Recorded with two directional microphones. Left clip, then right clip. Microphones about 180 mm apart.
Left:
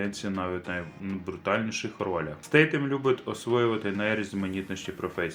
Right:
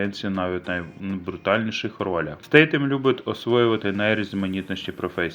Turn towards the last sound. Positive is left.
turn(degrees=-30)  # may be behind; listen again after turning